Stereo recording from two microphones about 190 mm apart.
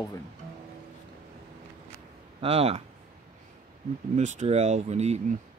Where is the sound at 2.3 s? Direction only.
30° right (ahead or behind).